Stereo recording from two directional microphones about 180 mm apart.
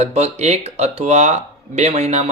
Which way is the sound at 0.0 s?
35° right (ahead or behind).